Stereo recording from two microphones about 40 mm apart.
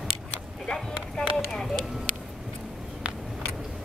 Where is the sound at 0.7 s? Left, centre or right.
Centre.